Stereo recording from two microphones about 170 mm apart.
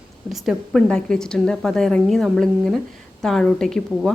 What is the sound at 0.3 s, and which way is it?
A woman's voice, centre (ahead or behind).